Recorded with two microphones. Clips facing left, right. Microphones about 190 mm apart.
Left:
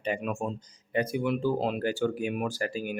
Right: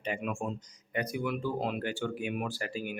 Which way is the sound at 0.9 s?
30° left (ahead or behind).